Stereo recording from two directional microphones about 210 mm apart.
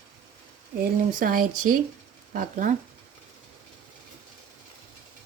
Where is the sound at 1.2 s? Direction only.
40° right (ahead or behind).